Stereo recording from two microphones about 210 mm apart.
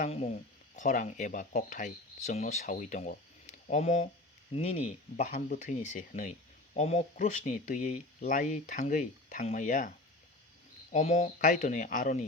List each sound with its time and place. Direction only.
0.0 s speech: 30° left (ahead or behind)
10.9 s speech: 30° left (ahead or behind)